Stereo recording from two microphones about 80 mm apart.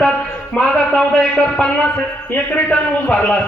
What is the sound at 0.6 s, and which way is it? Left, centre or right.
A man's voice, centre.